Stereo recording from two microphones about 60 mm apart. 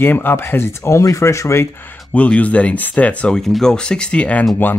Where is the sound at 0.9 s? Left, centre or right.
Left.